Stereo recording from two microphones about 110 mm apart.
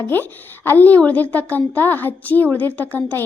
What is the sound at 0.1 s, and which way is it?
A woman's voice, 20° left (ahead or behind).